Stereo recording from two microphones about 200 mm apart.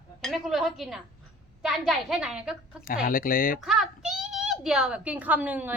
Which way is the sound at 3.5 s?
Centre (ahead or behind).